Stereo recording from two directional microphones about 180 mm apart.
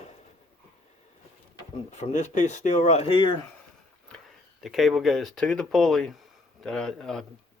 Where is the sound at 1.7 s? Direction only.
40° left (ahead or behind).